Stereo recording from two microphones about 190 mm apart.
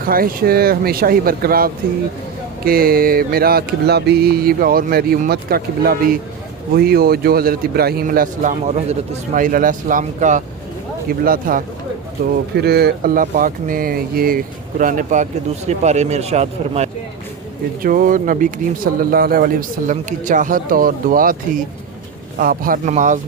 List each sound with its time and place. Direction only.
0.1 s speech: 50° right (ahead or behind)
17.8 s speech: 45° right (ahead or behind)